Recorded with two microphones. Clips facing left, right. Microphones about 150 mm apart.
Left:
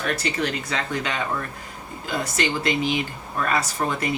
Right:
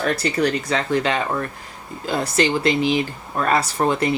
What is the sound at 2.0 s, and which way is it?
Speech, 30° right (ahead or behind).